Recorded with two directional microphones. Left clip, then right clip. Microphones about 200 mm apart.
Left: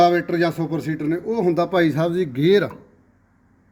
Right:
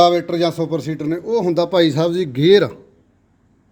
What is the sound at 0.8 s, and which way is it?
Speech, 35° right (ahead or behind).